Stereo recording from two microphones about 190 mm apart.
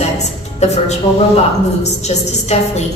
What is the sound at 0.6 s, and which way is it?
A man's voice, 35° left (ahead or behind).